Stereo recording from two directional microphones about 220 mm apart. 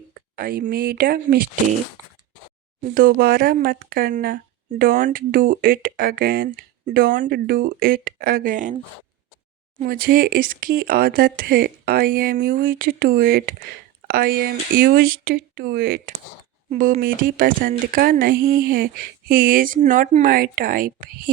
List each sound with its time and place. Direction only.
0.1 s speech: 45° right (ahead or behind)
2.8 s speech: 40° right (ahead or behind)
9.8 s speech: 40° right (ahead or behind)